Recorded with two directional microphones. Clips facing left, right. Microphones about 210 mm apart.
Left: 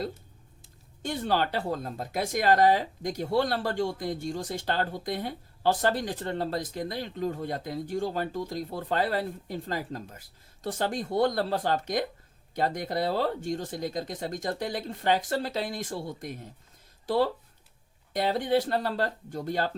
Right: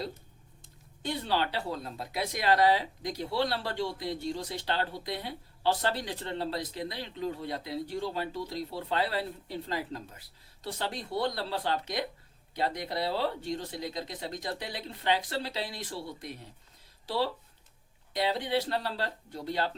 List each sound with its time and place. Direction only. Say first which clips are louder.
1.0 s speech: left 3 dB; 45° left (ahead or behind)